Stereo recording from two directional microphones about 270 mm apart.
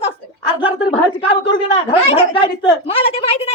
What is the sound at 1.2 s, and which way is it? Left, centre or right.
A woman's voice, left.